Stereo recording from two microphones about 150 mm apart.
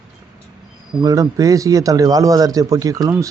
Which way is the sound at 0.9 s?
25° right (ahead or behind).